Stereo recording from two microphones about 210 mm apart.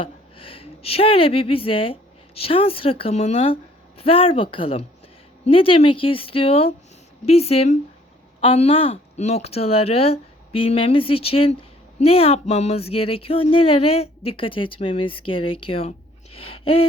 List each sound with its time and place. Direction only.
0.0 s speech: 25° left (ahead or behind)